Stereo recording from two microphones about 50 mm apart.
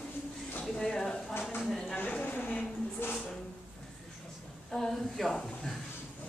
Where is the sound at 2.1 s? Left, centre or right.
Left.